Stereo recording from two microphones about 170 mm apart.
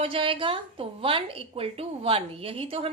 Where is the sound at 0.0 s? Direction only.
30° right (ahead or behind).